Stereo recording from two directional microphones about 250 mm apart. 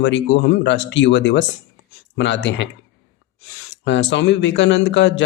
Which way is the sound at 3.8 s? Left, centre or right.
Left.